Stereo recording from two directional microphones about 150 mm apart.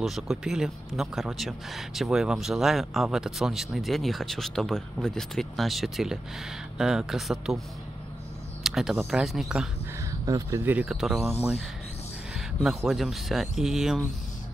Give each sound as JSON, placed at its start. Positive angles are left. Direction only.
{"t": 0.0, "sound": "speech", "side_deg": 0}
{"t": 8.6, "sound": "speech", "side_deg": 0}
{"t": 10.2, "sound": "speech", "side_deg": -20}
{"t": 12.4, "sound": "speech", "side_deg": 0}